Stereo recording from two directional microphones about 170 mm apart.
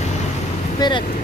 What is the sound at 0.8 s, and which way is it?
Speech, 25° left (ahead or behind).